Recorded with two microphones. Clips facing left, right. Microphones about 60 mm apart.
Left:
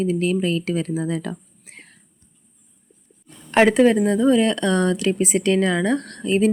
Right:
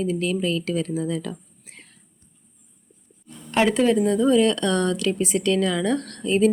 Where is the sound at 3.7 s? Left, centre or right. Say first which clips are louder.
Left 3 dB; left.